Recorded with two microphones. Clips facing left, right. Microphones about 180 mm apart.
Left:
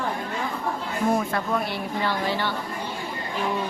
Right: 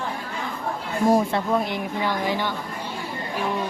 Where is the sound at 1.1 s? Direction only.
35° right (ahead or behind).